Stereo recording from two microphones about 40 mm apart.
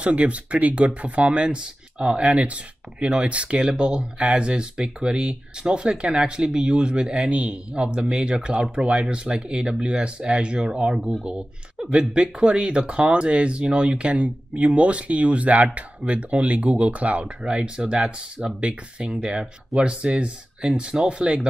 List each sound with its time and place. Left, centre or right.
0.0 s speech: right
7.2 s speech: right
7.7 s speech: right
11.9 s speech: right